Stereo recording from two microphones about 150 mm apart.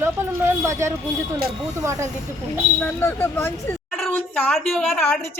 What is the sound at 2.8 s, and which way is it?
A woman's voice, 15° left (ahead or behind).